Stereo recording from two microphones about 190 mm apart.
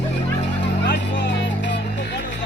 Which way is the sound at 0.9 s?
65° left (ahead or behind).